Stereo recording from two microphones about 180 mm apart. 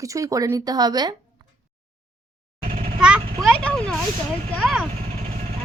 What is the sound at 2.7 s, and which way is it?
Vehicle, 50° right (ahead or behind).